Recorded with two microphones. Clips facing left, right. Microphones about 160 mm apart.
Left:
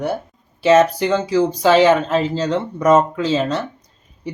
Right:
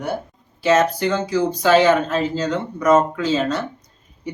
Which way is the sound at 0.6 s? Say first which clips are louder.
Left 4 dB; 30° left (ahead or behind).